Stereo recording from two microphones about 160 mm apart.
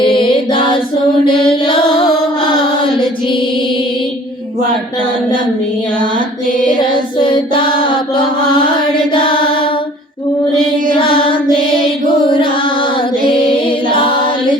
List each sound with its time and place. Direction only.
0.0 s music: 30° left (ahead or behind)
6.0 s mantra: 60° right (ahead or behind)
6.7 s child singing: 30° left (ahead or behind)
9.1 s mantra: 30° left (ahead or behind)
10.9 s mantra: 30° left (ahead or behind)
12.3 s female singing: 30° left (ahead or behind)
13.9 s a sound: 30° left (ahead or behind)